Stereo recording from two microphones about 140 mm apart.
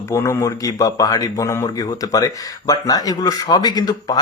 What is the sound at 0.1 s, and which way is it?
Speech, 20° left (ahead or behind).